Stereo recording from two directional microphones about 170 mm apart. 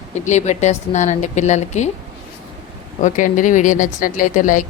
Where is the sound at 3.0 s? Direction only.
50° left (ahead or behind).